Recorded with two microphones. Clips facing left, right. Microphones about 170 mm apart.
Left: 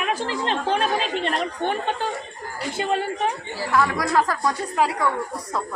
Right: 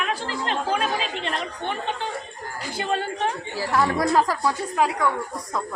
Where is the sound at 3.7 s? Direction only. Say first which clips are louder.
Even; 25° right (ahead or behind).